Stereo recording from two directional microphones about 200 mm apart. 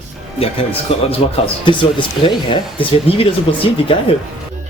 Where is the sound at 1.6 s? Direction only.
25° left (ahead or behind).